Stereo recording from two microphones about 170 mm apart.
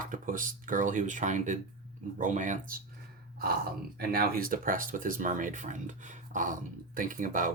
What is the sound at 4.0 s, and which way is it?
Speech, 60° right (ahead or behind).